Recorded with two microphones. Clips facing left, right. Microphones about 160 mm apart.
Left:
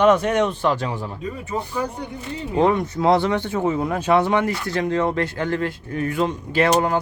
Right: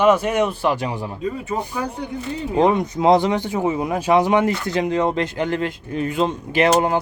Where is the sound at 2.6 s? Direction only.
15° right (ahead or behind).